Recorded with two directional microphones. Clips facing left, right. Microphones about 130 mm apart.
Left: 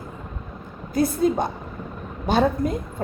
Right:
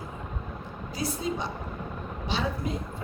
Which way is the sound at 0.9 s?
50° left (ahead or behind).